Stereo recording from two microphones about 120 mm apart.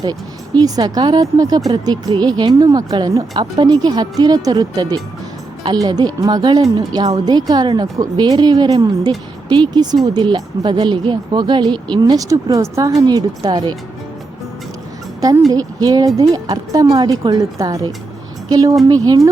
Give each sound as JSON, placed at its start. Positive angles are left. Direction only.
{"t": 0.0, "sound": "a woman's voice", "side_deg": -35}
{"t": 15.5, "sound": "a woman's voice", "side_deg": -35}